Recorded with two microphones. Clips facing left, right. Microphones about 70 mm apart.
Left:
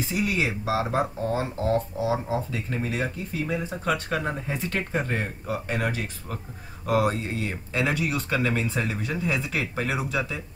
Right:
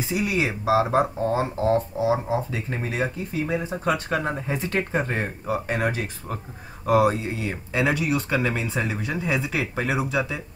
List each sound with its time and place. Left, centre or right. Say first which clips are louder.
0.1 s speech: right 2 dB; centre